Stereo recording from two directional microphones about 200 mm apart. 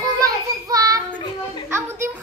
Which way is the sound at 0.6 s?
20° right (ahead or behind).